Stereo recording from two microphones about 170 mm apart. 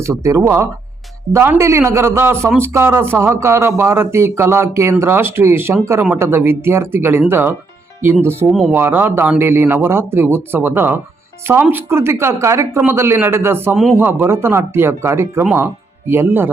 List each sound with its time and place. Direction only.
0.0 s speech: 20° right (ahead or behind)